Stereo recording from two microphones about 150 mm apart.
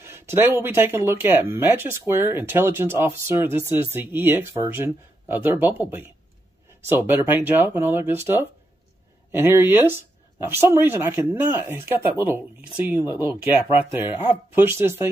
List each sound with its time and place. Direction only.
0.0 s speech: 15° right (ahead or behind)